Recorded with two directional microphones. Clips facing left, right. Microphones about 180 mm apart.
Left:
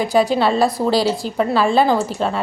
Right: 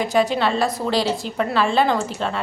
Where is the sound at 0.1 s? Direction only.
35° left (ahead or behind).